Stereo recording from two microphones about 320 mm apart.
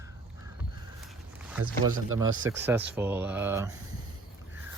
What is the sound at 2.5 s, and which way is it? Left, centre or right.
Speech, centre.